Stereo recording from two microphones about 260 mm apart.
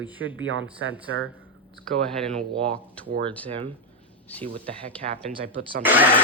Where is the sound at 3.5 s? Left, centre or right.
Centre.